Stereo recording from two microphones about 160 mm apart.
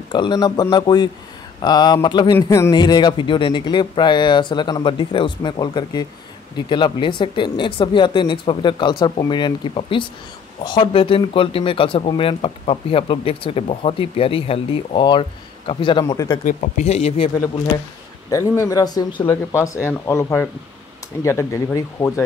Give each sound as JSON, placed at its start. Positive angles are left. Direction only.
{"t": 0.1, "sound": "speech", "side_deg": 30}
{"t": 16.4, "sound": "speech", "side_deg": 45}
{"t": 18.3, "sound": "speech", "side_deg": 20}